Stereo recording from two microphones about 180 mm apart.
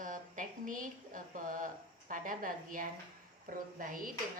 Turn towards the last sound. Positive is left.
turn(degrees=-50)  # may be behind; listen again after turning